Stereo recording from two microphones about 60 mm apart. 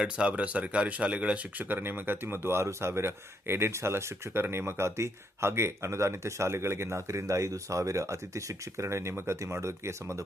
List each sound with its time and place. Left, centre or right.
0.0 s speech: centre; by 10.2 s right